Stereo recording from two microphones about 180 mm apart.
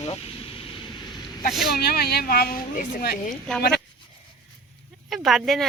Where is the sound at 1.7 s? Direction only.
60° left (ahead or behind).